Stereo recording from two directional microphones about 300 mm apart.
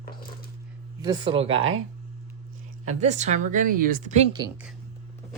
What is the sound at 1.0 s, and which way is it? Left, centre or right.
Speech, centre.